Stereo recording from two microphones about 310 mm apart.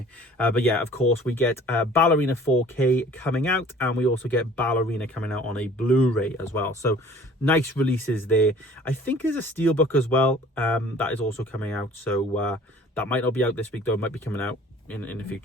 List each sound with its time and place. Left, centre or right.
0.3 s speech: centre